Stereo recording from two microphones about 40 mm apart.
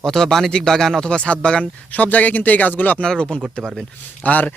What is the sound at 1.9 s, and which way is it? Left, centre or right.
Speech, left.